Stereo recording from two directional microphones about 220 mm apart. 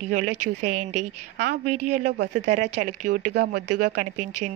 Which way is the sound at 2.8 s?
35° right (ahead or behind).